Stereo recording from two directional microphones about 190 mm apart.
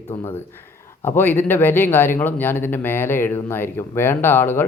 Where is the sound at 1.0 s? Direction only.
10° left (ahead or behind).